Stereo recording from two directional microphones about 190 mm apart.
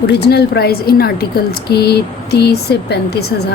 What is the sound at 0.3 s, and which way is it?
Speech, 55° left (ahead or behind).